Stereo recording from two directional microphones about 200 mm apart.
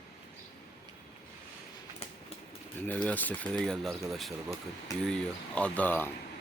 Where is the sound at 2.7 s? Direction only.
10° left (ahead or behind).